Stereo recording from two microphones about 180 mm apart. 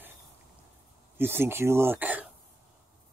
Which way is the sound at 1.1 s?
10° right (ahead or behind).